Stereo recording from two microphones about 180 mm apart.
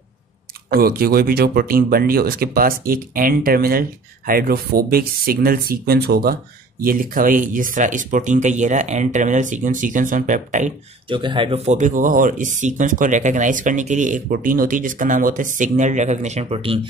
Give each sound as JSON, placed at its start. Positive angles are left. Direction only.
{"t": 0.7, "sound": "speech", "side_deg": -55}
{"t": 11.1, "sound": "speech", "side_deg": -30}